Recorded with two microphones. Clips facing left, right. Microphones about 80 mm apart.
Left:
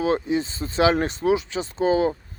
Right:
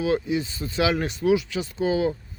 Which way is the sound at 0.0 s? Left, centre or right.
Left.